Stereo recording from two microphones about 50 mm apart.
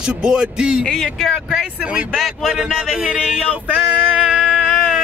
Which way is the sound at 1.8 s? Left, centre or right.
Right.